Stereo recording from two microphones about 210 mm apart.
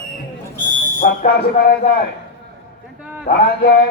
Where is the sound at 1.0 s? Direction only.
45° left (ahead or behind).